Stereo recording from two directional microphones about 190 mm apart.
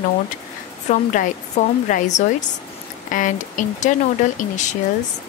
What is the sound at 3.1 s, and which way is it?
Speech, 40° left (ahead or behind).